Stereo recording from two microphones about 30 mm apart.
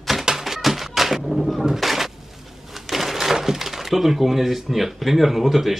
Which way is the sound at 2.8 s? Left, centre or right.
Centre.